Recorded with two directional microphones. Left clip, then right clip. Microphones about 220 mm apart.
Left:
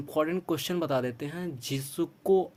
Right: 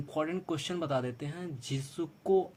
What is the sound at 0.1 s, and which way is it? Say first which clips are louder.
Speech: left 5 dB; 40° left (ahead or behind).